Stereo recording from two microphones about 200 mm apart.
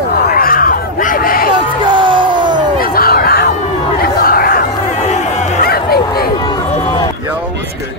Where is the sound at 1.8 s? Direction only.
25° right (ahead or behind).